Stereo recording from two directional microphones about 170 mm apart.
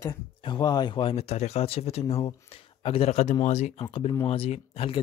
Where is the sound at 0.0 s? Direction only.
25° left (ahead or behind).